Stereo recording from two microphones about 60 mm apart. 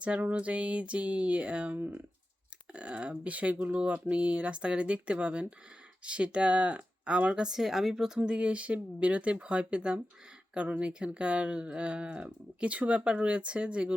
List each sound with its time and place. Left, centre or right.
0.0 s speech: right; by 8.2 s centre
8.2 s speech: centre